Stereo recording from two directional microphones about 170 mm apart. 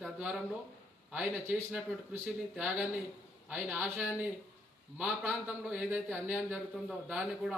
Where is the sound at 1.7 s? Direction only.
5° right (ahead or behind).